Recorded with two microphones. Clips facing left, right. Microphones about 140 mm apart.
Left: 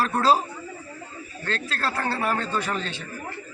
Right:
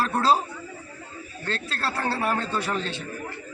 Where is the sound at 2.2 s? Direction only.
5° right (ahead or behind).